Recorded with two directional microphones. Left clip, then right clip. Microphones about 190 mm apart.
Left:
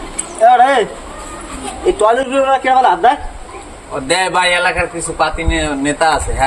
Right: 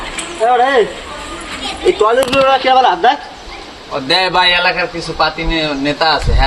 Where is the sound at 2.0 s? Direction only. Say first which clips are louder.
Right 1 dB; 15° left (ahead or behind).